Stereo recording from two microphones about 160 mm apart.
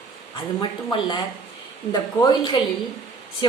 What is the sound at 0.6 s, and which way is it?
Speech, 30° left (ahead or behind).